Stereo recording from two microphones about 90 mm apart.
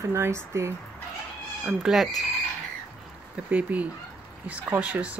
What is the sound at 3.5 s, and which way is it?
Speech, 15° right (ahead or behind).